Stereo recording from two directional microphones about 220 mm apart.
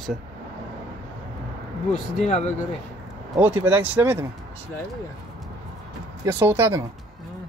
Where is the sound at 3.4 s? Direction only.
10° right (ahead or behind).